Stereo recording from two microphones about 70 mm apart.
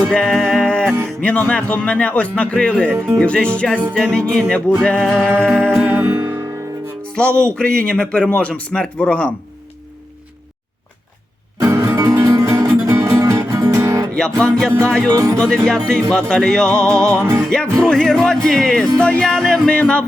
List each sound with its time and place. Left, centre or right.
0.1 s music: centre
1.0 s speech: centre
5.9 s music: right
6.1 s music: right
7.0 s music: centre
7.5 s speech: centre
11.6 s music: right
14.4 s speech: centre
15.1 s speech: right
15.6 s speech: centre
17.2 s music: right
17.7 s speech: centre